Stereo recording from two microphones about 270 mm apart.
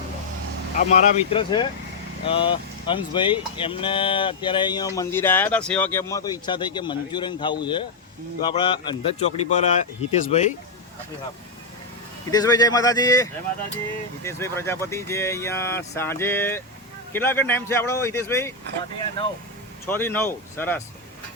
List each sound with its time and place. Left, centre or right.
0.8 s speech: left
12.3 s speech: centre
14.3 s speech: centre
19.9 s speech: centre